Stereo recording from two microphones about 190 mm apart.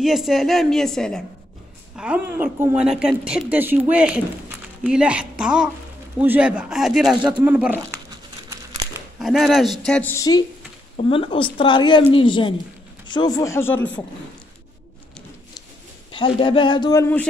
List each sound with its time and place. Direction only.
0.0 s a woman's voice: centre (ahead or behind)
9.2 s a woman's voice: centre (ahead or behind)
10.1 s a man's voice: 20° left (ahead or behind)
16.1 s a man's voice: 25° left (ahead or behind)